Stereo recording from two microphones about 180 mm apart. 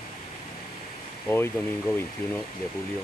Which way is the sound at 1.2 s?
15° left (ahead or behind).